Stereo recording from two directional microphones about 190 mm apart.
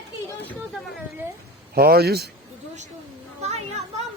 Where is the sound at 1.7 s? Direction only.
55° right (ahead or behind).